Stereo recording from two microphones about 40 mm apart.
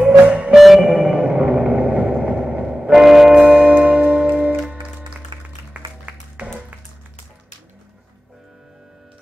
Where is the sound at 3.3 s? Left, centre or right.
Right.